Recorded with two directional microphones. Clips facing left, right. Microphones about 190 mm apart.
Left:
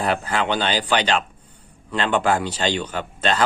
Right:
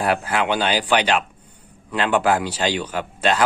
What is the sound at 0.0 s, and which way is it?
Speech, 5° right (ahead or behind).